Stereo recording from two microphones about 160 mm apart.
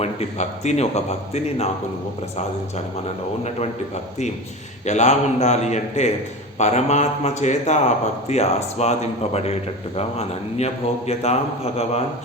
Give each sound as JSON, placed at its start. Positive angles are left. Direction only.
{"t": 0.0, "sound": "a man's voice", "side_deg": 45}
{"t": 4.9, "sound": "a man's voice", "side_deg": 45}